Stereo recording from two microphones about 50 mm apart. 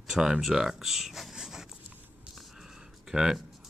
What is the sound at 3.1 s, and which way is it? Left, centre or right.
Speech, centre.